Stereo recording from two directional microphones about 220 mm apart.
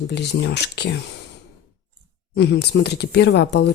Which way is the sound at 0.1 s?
50° left (ahead or behind).